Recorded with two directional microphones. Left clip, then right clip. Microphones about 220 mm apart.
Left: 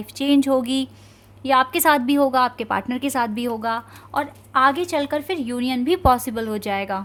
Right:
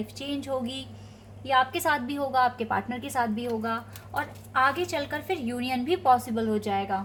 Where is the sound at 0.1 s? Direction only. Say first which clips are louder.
Left 15 dB; 50° left (ahead or behind).